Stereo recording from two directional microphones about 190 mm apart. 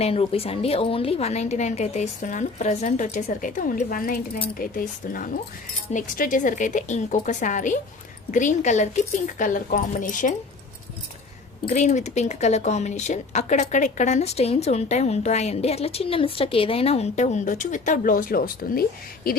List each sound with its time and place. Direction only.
0.0 s speech: 30° left (ahead or behind)
11.7 s speech: 40° left (ahead or behind)